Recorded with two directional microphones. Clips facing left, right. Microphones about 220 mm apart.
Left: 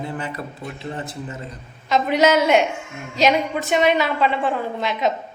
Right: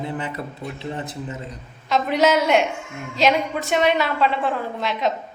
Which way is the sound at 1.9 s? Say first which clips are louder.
Left 1 dB; centre (ahead or behind).